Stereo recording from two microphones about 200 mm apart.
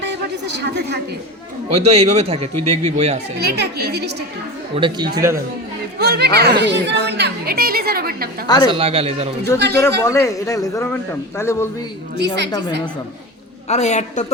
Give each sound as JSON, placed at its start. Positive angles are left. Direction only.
{"t": 0.6, "sound": "a woman's voice", "side_deg": -60}
{"t": 1.7, "sound": "a man's voice", "side_deg": -30}
{"t": 3.3, "sound": "a woman's voice", "side_deg": -55}
{"t": 4.7, "sound": "a man's voice", "side_deg": -25}
{"t": 6.0, "sound": "a woman's voice", "side_deg": -55}
{"t": 8.4, "sound": "speech", "side_deg": 20}
{"t": 8.7, "sound": "speech", "side_deg": -30}
{"t": 9.7, "sound": "a man's voice", "side_deg": 15}
{"t": 12.1, "sound": "a woman's voice", "side_deg": -60}
{"t": 13.7, "sound": "a man's voice", "side_deg": 35}